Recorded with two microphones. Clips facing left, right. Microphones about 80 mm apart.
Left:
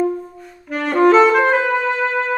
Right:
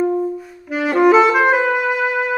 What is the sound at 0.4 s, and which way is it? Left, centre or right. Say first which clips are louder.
Music: right 2 dB; centre.